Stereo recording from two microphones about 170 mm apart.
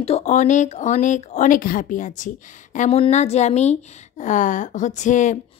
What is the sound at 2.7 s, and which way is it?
A woman's voice, 40° left (ahead or behind).